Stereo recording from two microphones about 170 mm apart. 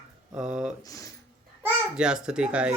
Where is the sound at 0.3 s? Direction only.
5° right (ahead or behind).